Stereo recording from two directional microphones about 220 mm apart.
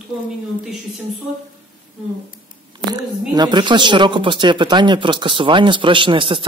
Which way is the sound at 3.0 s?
20° right (ahead or behind).